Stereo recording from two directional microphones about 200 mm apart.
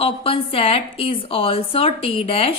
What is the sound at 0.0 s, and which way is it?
A woman's voice, 30° left (ahead or behind).